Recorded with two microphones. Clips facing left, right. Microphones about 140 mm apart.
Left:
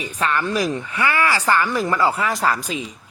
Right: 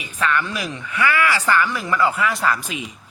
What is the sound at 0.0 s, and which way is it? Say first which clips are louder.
A man's voice: even; 35° left (ahead or behind).